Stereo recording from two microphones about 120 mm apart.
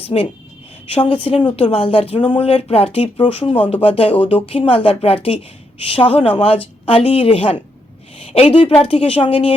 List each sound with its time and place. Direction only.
0.1 s a woman's voice: 55° left (ahead or behind)
1.5 s a woman's voice: 55° left (ahead or behind)